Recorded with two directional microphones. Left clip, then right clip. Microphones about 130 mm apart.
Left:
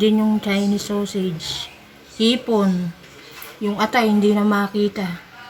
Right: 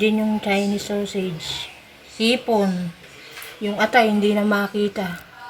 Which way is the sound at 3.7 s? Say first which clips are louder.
Right 2 dB; 5° right (ahead or behind).